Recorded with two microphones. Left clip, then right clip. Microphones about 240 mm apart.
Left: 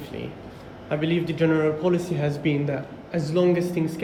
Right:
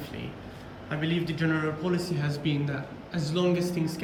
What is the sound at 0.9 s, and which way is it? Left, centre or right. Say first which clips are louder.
A man's voice: left 6 dB; centre.